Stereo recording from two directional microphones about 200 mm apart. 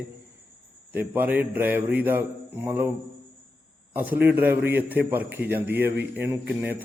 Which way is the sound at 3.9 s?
10° right (ahead or behind).